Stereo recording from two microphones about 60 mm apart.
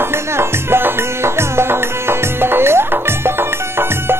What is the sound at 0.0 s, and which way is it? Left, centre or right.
Music, right.